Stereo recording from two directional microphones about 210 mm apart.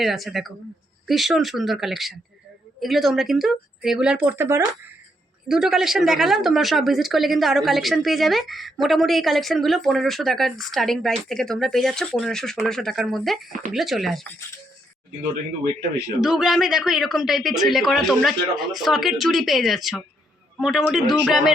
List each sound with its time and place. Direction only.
0.0 s a woman's voice: centre (ahead or behind)
16.2 s a woman's voice: centre (ahead or behind)